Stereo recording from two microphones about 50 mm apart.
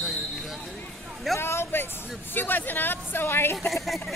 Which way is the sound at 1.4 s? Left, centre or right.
Left.